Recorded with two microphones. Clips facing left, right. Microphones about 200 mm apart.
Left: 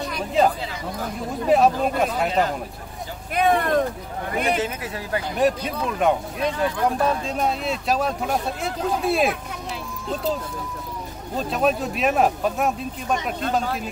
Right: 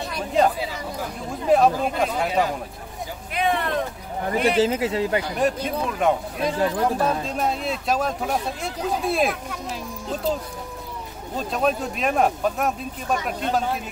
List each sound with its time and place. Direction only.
0.3 s speech: centre (ahead or behind)
3.3 s speech: 45° left (ahead or behind)
4.4 s speech: 30° right (ahead or behind)
5.4 s speech: centre (ahead or behind)
11.3 s speech: centre (ahead or behind)